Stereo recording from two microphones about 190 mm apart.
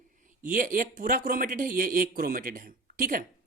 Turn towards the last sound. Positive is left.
turn(degrees=-50)  # may be behind; listen again after turning